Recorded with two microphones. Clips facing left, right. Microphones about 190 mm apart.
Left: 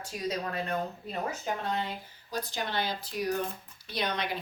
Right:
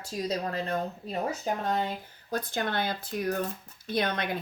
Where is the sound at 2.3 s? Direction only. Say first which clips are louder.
Right 3 dB; 55° right (ahead or behind).